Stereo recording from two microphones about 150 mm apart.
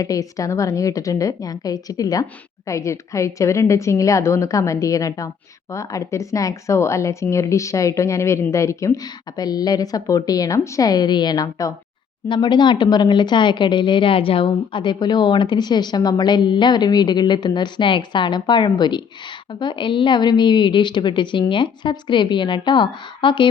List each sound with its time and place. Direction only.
0.0 s a woman's voice: 20° left (ahead or behind)